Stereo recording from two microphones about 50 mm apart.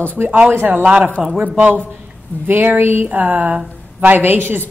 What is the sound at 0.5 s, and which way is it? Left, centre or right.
A woman's voice, right.